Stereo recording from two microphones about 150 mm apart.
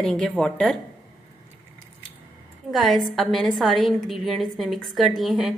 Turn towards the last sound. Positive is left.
turn(degrees=0)  # may be behind; listen again after turning